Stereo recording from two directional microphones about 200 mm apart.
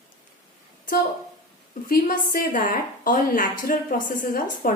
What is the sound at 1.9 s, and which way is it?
A woman's voice, 45° left (ahead or behind).